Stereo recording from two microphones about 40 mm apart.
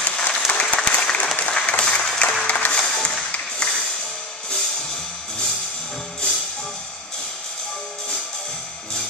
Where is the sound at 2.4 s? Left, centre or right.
Left.